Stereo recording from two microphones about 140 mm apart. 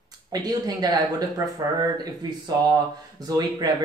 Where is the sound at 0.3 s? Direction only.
30° right (ahead or behind).